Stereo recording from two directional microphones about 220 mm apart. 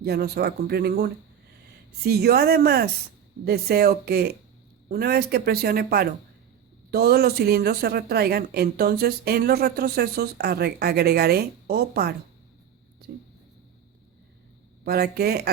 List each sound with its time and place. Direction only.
0.0 s speech: 45° right (ahead or behind)
14.8 s speech: 45° right (ahead or behind)